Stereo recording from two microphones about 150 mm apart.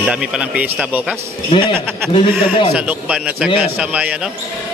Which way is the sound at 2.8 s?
10° right (ahead or behind).